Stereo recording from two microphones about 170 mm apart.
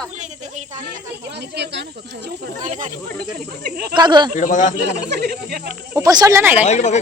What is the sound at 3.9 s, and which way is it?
Speech, 25° right (ahead or behind).